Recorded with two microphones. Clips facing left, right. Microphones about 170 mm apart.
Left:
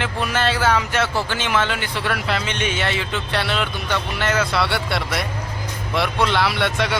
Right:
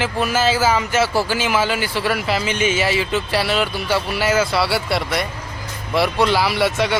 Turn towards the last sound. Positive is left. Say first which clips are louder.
# right 3 dB
turn(degrees=0)  # may be behind; listen again after turning